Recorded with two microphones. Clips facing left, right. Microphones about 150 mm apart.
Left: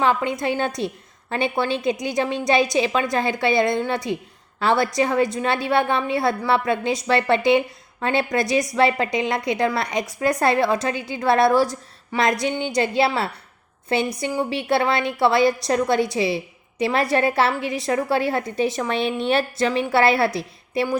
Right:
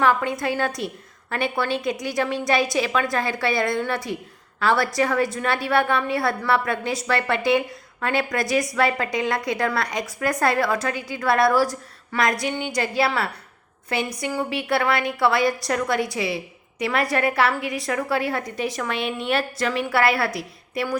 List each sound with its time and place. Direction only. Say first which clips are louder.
0.0 s a woman's voice: even; 20° left (ahead or behind)